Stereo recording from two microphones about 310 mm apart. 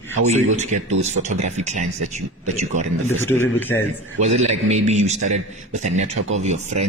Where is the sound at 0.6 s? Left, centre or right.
Right.